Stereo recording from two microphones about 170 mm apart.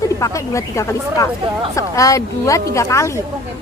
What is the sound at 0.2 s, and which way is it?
Speech, 20° left (ahead or behind).